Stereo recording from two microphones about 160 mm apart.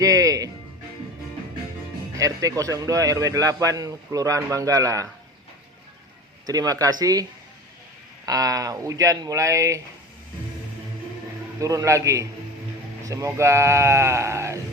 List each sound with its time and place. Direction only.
0.0 s a man's voice: 20° right (ahead or behind)
2.1 s a man's voice: 20° right (ahead or behind)
6.4 s a man's voice: 20° right (ahead or behind)
8.3 s a man's voice: 20° right (ahead or behind)
11.6 s a man's voice: 20° right (ahead or behind)